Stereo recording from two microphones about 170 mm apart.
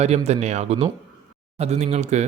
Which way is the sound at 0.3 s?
40° right (ahead or behind).